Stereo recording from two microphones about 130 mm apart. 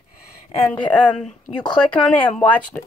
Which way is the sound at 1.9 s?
10° left (ahead or behind).